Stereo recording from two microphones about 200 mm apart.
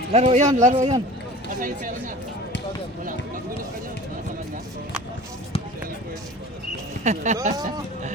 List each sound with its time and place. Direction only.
0.1 s speech: 30° right (ahead or behind)
7.0 s speech: 35° right (ahead or behind)